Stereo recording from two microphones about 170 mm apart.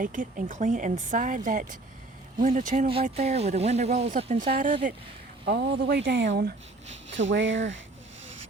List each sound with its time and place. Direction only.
0.0 s speech: 50° right (ahead or behind)
2.9 s speech: 40° right (ahead or behind)
5.5 s speech: 75° right (ahead or behind)
7.1 s speech: 90° right